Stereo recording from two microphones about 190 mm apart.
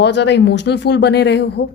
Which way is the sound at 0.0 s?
65° left (ahead or behind).